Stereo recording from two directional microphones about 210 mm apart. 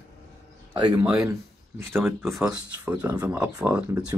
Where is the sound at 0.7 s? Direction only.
20° right (ahead or behind).